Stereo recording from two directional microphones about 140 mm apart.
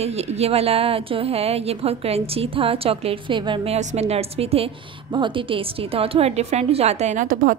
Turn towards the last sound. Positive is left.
turn(degrees=-75)  # may be behind; listen again after turning